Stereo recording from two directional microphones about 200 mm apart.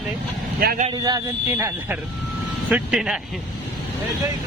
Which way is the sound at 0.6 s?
50° right (ahead or behind).